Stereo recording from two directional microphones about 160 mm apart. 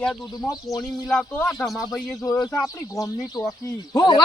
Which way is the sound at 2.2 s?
20° left (ahead or behind).